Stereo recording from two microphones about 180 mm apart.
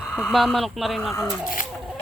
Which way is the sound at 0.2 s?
Centre (ahead or behind).